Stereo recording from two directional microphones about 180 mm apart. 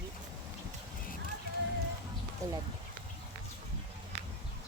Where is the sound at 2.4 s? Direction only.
20° right (ahead or behind).